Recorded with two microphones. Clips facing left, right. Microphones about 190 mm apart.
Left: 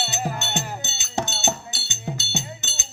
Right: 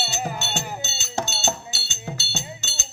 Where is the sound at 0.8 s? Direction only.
15° left (ahead or behind).